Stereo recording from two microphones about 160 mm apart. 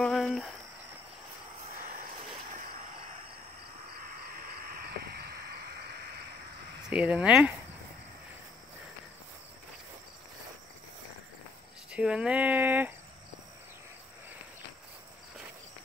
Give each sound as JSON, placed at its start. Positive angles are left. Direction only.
{"t": 0.0, "sound": "a sound", "side_deg": 0}
{"t": 4.4, "sound": "caw", "side_deg": -70}
{"t": 6.9, "sound": "speech", "side_deg": -5}
{"t": 11.9, "sound": "speech", "side_deg": -5}